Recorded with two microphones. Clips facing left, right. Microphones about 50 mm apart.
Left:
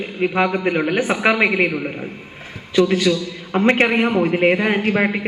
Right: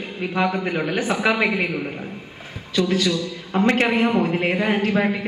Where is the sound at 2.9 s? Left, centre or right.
Left.